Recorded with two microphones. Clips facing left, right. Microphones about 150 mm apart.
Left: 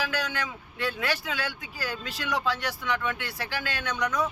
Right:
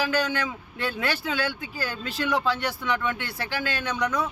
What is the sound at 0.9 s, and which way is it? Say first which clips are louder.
A man's voice: right 3 dB; 25° right (ahead or behind).